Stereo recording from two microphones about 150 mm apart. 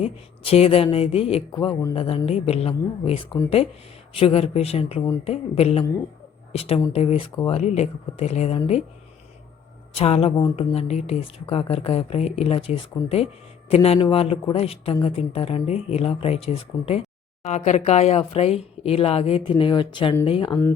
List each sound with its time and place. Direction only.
0.0 s speech: 45° left (ahead or behind)
9.9 s speech: 40° left (ahead or behind)
20.5 s speech: 15° left (ahead or behind)